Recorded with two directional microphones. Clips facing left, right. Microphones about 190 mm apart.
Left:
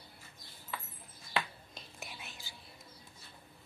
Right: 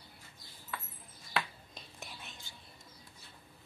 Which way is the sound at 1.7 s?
5° left (ahead or behind).